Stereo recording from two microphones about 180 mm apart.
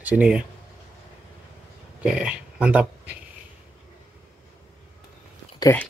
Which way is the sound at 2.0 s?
5° right (ahead or behind).